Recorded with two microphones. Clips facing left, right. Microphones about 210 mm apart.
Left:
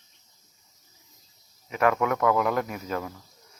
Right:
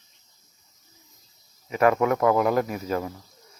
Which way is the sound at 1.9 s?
30° right (ahead or behind).